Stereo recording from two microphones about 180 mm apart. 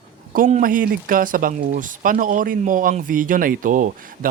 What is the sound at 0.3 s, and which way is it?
Speech, 50° right (ahead or behind).